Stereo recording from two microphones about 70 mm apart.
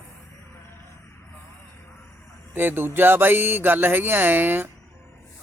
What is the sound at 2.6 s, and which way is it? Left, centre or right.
Speech, right.